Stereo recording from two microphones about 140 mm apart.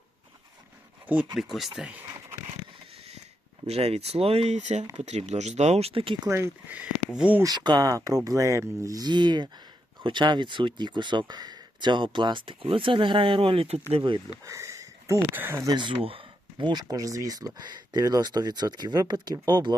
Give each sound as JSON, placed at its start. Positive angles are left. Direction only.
{"t": 1.0, "sound": "speech", "side_deg": -10}
{"t": 3.7, "sound": "speech", "side_deg": -45}
{"t": 6.2, "sound": "speech", "side_deg": -15}
{"t": 7.4, "sound": "speech", "side_deg": -30}
{"t": 14.4, "sound": "speech", "side_deg": -20}